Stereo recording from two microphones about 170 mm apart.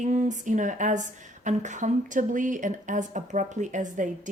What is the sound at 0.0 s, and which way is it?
A woman's voice, 45° right (ahead or behind).